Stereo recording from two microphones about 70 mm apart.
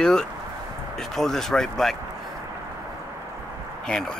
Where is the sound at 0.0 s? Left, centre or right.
Centre.